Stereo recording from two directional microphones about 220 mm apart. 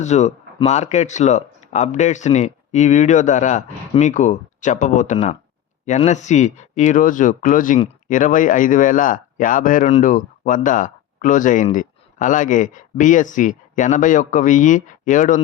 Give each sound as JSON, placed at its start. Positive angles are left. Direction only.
{"t": 0.0, "sound": "speech", "side_deg": 30}